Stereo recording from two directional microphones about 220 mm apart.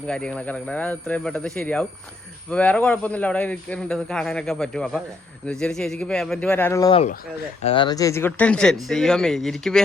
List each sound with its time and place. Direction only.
0.1 s speech: 5° left (ahead or behind)
7.0 s speech: 35° left (ahead or behind)
7.7 s speech: 20° left (ahead or behind); by 9.8 s centre (ahead or behind)